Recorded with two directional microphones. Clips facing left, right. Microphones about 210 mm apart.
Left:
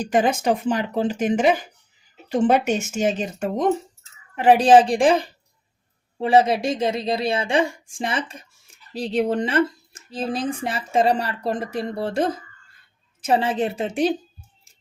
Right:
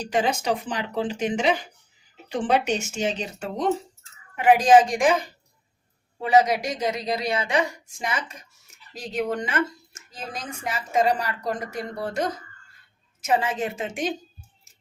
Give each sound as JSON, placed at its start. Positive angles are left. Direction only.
{"t": 0.0, "sound": "speech", "side_deg": 50}
{"t": 4.4, "sound": "speech", "side_deg": 30}